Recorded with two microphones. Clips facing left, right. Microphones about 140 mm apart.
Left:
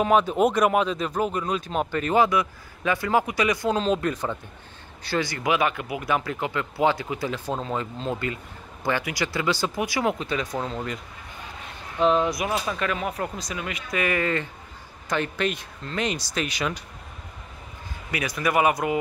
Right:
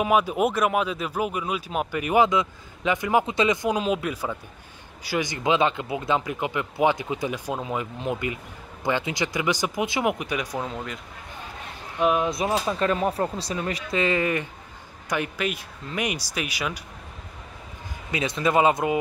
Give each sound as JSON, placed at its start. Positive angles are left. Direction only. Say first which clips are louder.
{"t": 0.0, "sound": "speech", "louder": "left 2 dB", "side_deg": -10}
{"t": 12.0, "sound": "speech", "louder": "left 1 dB", "side_deg": -10}
{"t": 12.3, "sound": "speech", "louder": "right 2 dB", "side_deg": -30}
{"t": 18.1, "sound": "speech", "louder": "right 2 dB", "side_deg": -25}